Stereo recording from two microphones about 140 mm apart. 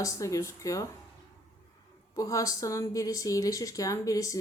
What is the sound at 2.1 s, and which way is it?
A woman's voice, 25° left (ahead or behind).